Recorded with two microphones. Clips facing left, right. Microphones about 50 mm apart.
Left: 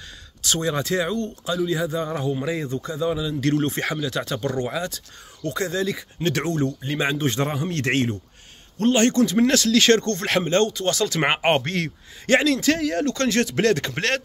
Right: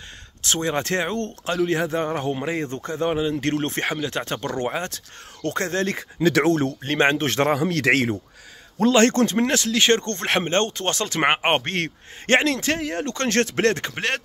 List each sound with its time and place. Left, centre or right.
0.4 s speech: right
1.4 s speech: right
2.7 s speech: right
3.3 s speech: right
9.1 s speech: right
9.5 s speech: right
11.2 s speech: right
13.3 s speech: right
13.8 s speech: centre